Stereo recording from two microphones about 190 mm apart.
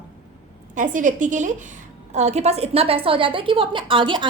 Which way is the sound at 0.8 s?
40° right (ahead or behind).